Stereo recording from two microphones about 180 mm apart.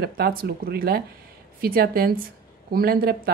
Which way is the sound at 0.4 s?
60° right (ahead or behind).